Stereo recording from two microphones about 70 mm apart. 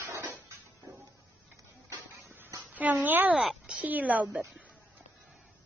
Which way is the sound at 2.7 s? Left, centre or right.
Right.